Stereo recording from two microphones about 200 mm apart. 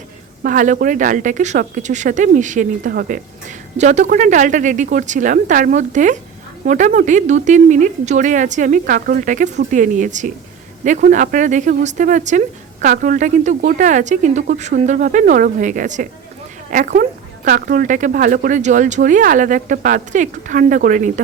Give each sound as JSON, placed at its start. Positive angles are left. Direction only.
{"t": 0.4, "sound": "a woman's voice", "side_deg": -40}